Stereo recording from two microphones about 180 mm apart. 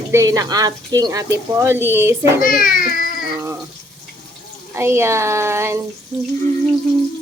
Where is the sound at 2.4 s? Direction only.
50° left (ahead or behind).